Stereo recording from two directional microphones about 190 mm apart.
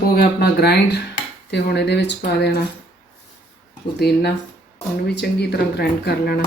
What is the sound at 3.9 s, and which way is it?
Speech, 60° left (ahead or behind).